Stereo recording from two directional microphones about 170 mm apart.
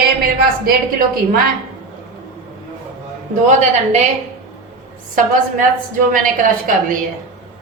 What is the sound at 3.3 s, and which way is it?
Speech, 45° right (ahead or behind).